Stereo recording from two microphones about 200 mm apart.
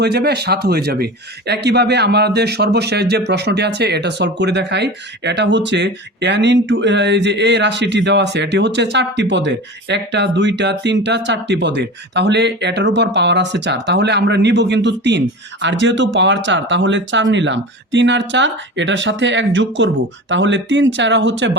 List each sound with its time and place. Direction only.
0.0 s speech: 55° right (ahead or behind)